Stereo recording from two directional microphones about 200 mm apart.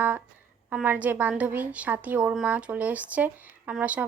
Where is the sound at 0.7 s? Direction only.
5° right (ahead or behind).